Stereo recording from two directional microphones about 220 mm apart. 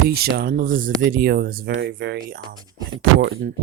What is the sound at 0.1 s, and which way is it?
Speech, 45° right (ahead or behind).